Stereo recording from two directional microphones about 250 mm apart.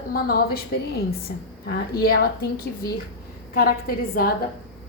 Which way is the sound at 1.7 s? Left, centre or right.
Left.